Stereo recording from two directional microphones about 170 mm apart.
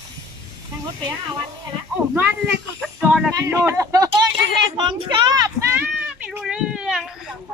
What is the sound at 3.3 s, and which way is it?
Speech, 15° right (ahead or behind).